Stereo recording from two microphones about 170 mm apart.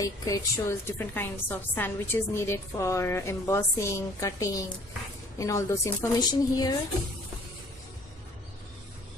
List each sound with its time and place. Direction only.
0.0 s a woman's voice: 20° left (ahead or behind)